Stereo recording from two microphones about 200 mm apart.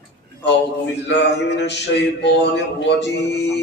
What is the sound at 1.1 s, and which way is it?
Mantra, 60° left (ahead or behind).